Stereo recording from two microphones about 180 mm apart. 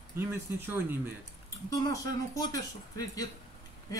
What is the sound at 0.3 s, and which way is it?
Speech, 15° right (ahead or behind).